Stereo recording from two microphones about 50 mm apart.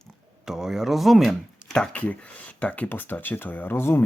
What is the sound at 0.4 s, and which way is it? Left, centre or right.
Speech, centre.